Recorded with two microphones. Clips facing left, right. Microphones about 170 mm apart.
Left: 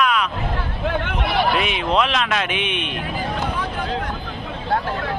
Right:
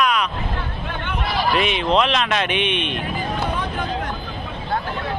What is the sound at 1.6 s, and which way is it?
Speech, 5° left (ahead or behind).